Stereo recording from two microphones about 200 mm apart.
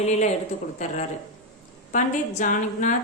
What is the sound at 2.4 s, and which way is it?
Speech, 40° left (ahead or behind).